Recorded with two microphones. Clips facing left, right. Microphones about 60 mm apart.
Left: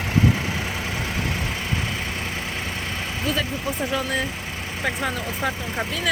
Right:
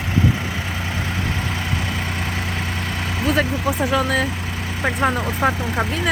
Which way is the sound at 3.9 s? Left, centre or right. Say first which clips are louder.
Right 5 dB; right.